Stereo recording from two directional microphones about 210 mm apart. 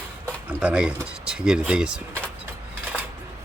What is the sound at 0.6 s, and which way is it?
Speech, 5° right (ahead or behind).